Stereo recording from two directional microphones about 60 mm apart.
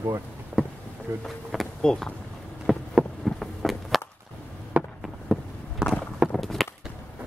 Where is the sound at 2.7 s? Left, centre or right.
Centre.